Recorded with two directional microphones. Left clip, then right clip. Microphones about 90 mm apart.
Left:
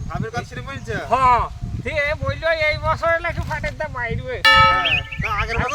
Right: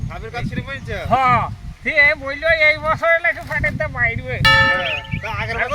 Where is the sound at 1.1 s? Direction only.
10° left (ahead or behind).